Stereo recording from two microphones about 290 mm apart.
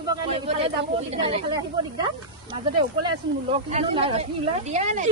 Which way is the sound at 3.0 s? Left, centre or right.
Centre.